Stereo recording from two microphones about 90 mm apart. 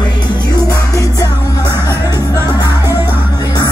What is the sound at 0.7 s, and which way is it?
Music, 40° left (ahead or behind).